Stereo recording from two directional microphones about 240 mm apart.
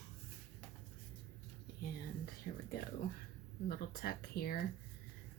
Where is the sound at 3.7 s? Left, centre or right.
Left.